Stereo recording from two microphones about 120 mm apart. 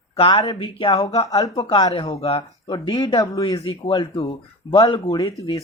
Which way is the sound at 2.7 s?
35° left (ahead or behind).